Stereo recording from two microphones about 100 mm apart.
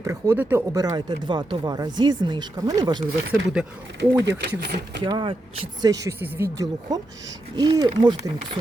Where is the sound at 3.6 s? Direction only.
5° right (ahead or behind).